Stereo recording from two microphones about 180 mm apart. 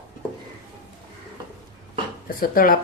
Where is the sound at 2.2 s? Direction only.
55° left (ahead or behind).